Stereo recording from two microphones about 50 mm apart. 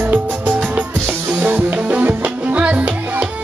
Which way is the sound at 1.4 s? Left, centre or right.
Right.